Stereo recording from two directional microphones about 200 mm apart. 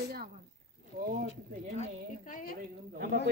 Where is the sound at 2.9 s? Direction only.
60° right (ahead or behind).